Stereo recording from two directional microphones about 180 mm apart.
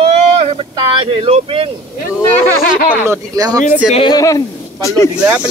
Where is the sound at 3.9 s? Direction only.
30° left (ahead or behind).